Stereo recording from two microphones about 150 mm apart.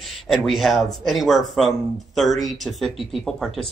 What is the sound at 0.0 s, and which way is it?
Speech, centre (ahead or behind).